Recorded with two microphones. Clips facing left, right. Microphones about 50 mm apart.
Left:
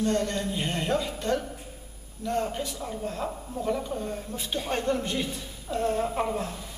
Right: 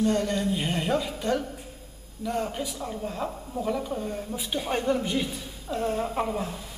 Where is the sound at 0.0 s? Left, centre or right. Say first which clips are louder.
Right 2 dB; centre.